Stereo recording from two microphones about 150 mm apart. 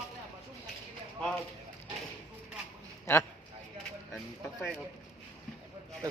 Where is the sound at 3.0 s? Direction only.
15° left (ahead or behind).